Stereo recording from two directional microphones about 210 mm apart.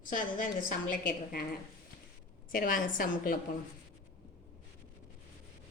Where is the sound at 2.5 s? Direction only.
40° left (ahead or behind).